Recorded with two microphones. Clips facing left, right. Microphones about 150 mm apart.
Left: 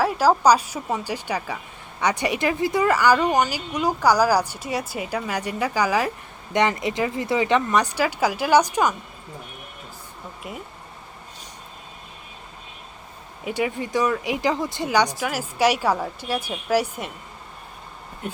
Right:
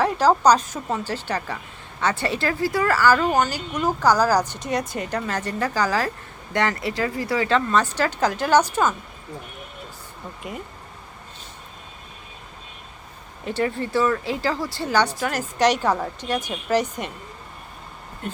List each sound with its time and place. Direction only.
0.0 s speech: 5° left (ahead or behind)
10.4 s speech: centre (ahead or behind)
13.4 s speech: 10° left (ahead or behind)